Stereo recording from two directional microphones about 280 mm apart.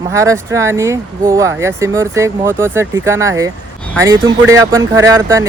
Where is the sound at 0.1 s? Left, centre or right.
Centre.